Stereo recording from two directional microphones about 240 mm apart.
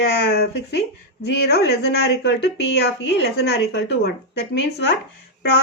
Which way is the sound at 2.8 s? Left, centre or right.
Left.